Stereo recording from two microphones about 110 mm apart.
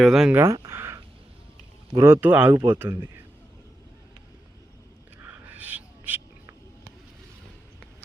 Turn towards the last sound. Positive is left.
turn(degrees=-15)  # may be behind; listen again after turning